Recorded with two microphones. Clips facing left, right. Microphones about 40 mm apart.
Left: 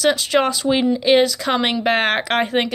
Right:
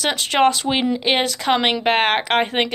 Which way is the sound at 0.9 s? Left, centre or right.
Right.